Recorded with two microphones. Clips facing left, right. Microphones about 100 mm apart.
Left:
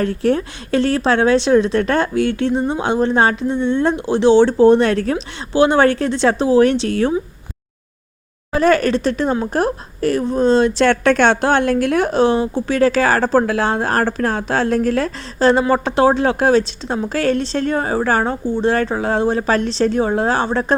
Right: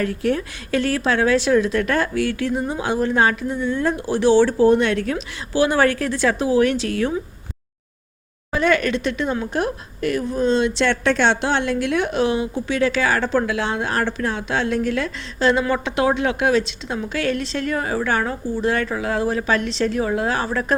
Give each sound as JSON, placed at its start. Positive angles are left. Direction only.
{"t": 0.0, "sound": "a woman's voice", "side_deg": 35}
{"t": 8.5, "sound": "speech", "side_deg": 40}